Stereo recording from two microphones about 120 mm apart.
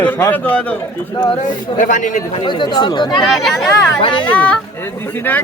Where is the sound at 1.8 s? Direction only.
90° left.